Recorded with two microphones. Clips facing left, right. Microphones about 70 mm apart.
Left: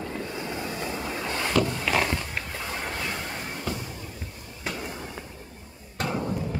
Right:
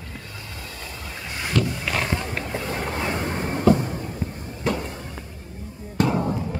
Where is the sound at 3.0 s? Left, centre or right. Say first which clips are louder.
Right 7 dB; right.